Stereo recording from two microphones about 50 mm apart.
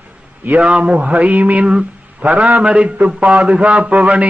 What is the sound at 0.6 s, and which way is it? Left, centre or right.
A man's voice, centre.